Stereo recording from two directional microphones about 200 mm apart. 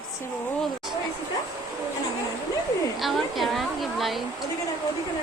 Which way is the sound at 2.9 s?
Centre (ahead or behind).